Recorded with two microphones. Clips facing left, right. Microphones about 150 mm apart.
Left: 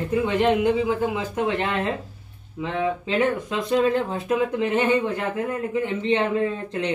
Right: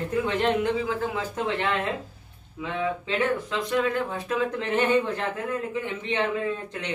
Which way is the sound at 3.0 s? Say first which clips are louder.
Left 3 dB; 15° left (ahead or behind).